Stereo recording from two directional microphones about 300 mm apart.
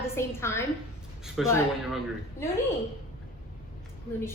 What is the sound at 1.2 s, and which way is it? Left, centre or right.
Speech, centre.